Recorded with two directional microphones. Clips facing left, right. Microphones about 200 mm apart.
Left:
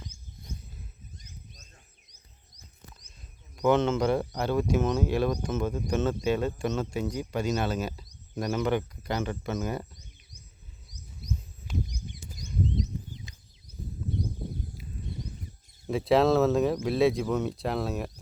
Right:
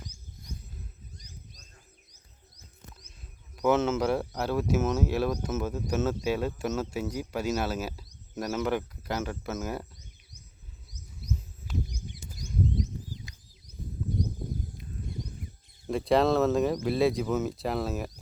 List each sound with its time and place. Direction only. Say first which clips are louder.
3.5 s speech: left 1 dB; 5° right (ahead or behind)
12.7 s a sound: even; 20° left (ahead or behind)
15.9 s speech: left 1 dB; centre (ahead or behind)